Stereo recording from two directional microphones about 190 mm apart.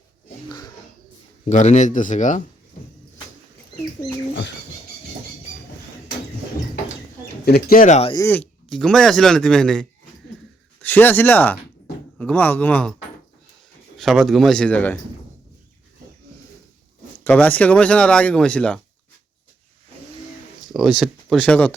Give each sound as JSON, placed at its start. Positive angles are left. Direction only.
{"t": 0.4, "sound": "a sound", "side_deg": 20}
{"t": 1.5, "sound": "speech", "side_deg": 40}
{"t": 7.4, "sound": "speech", "side_deg": 50}
{"t": 8.1, "sound": "a man's voice", "side_deg": 10}
{"t": 14.0, "sound": "speech", "side_deg": 0}
{"t": 17.2, "sound": "speech", "side_deg": 10}
{"t": 20.7, "sound": "speech", "side_deg": 0}